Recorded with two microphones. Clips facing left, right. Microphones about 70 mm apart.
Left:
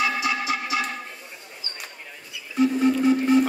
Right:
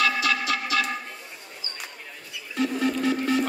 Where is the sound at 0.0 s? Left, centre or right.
Right.